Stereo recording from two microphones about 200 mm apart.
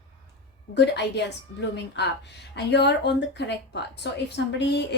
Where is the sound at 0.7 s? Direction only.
60° left (ahead or behind).